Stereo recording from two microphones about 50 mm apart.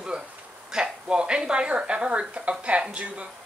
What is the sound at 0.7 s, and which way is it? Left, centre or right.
Speech, centre.